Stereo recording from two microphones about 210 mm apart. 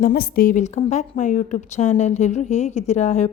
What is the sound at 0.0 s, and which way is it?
A woman's voice, 45° left (ahead or behind).